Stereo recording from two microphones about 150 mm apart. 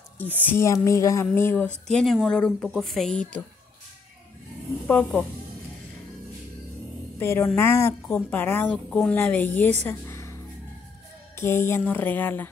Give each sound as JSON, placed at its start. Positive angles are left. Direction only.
{"t": 0.4, "sound": "a woman's voice", "side_deg": 15}
{"t": 4.8, "sound": "speech", "side_deg": 10}
{"t": 7.2, "sound": "a woman's voice", "side_deg": 15}
{"t": 9.8, "sound": "music", "side_deg": 20}
{"t": 11.3, "sound": "a woman's voice", "side_deg": 15}